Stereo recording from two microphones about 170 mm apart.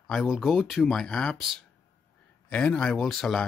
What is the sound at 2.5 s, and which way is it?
Speech, 5° left (ahead or behind).